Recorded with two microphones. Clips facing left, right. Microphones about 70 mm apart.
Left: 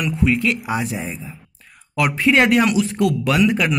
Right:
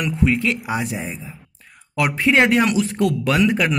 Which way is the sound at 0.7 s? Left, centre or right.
Centre.